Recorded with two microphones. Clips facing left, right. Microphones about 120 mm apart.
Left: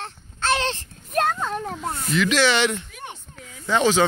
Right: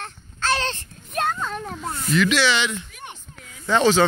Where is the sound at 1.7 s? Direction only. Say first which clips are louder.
Right 1 dB; 25° left (ahead or behind).